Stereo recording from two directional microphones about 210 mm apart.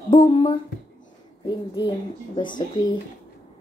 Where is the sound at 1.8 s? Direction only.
20° left (ahead or behind).